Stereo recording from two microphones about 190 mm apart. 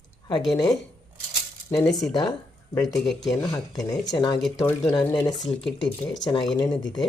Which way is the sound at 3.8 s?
20° left (ahead or behind).